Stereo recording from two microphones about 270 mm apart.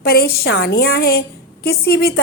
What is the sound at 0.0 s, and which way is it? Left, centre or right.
A woman's voice, left.